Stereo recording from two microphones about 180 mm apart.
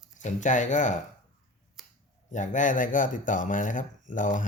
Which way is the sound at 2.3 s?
45° left (ahead or behind).